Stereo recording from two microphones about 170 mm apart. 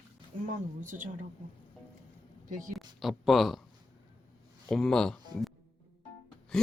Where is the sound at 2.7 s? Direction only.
Centre (ahead or behind).